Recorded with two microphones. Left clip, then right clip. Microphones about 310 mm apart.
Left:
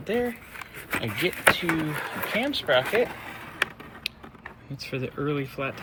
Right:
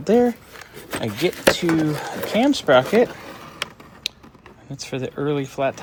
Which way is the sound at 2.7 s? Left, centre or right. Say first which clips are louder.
Right 7 dB; right.